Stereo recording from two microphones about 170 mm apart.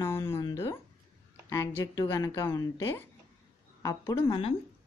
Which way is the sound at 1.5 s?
20° left (ahead or behind).